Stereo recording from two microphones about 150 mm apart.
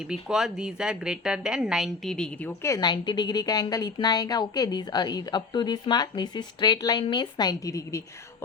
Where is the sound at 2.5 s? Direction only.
20° left (ahead or behind).